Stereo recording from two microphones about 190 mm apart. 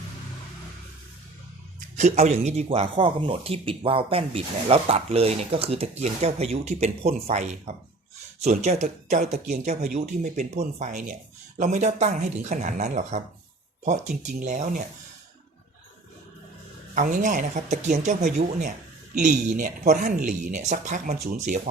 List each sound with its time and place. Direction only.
2.0 s speech: 40° right (ahead or behind)
16.9 s speech: 40° right (ahead or behind)